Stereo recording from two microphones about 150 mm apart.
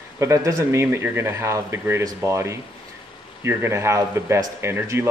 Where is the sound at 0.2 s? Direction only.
20° right (ahead or behind).